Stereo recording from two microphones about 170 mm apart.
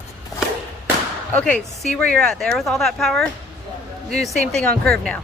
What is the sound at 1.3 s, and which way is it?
Speech, 10° left (ahead or behind).